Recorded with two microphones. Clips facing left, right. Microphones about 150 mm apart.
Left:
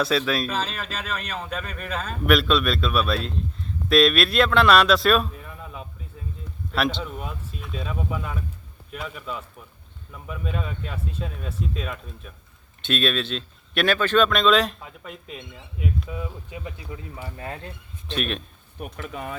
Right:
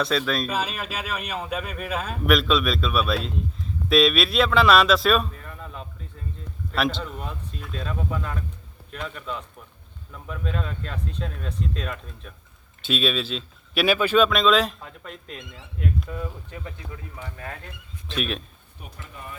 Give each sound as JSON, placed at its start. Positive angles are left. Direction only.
{"t": 0.0, "sound": "speech", "side_deg": 5}
{"t": 0.5, "sound": "speech", "side_deg": -10}
{"t": 17.3, "sound": "speech", "side_deg": 25}
{"t": 18.1, "sound": "speech", "side_deg": 0}
{"t": 18.8, "sound": "speech", "side_deg": 80}